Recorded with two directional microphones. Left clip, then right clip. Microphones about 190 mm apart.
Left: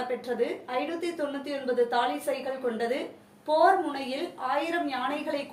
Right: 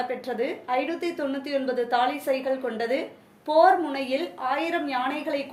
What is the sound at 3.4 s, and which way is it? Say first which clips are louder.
A woman's voice: right 3 dB; 35° right (ahead or behind).